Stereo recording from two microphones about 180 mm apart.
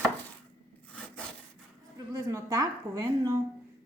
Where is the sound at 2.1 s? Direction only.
15° right (ahead or behind).